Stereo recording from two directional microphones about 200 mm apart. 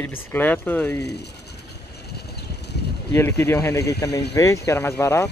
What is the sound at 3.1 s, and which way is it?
Speech, 10° left (ahead or behind).